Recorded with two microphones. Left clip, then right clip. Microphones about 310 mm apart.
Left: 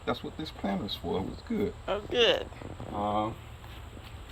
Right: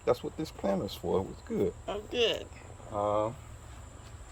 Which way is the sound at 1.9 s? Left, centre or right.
Centre.